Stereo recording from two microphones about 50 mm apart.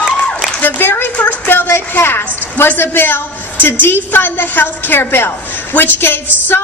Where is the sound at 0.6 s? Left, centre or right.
Left.